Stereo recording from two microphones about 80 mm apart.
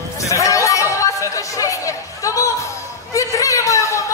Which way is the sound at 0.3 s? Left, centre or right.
Left.